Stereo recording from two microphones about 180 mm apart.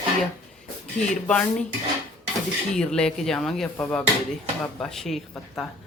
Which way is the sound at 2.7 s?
5° left (ahead or behind).